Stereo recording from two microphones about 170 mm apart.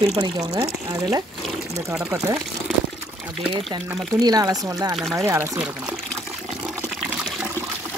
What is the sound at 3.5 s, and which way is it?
Speech, 25° right (ahead or behind).